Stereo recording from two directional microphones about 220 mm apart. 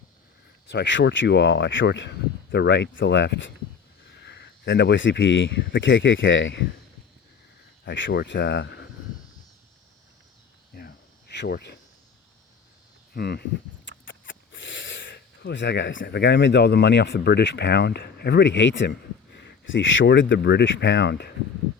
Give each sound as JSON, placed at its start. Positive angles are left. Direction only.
{"t": 0.7, "sound": "speech", "side_deg": 55}
{"t": 7.9, "sound": "speech", "side_deg": 55}
{"t": 10.8, "sound": "cricket", "side_deg": 45}
{"t": 13.1, "sound": "speech", "side_deg": 45}
{"t": 14.0, "sound": "speech", "side_deg": 60}